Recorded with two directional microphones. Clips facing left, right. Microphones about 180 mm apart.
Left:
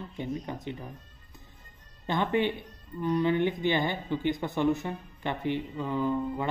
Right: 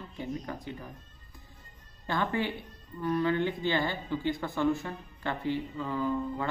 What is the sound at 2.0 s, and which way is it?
Speech, 20° left (ahead or behind).